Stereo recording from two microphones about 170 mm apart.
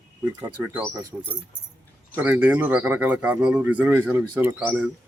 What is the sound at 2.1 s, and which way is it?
Speech, 10° right (ahead or behind).